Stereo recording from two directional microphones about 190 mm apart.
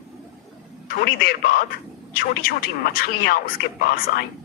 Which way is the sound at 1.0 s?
55° left (ahead or behind).